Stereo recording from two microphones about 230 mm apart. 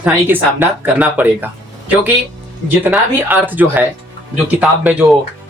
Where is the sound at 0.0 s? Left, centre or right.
Centre.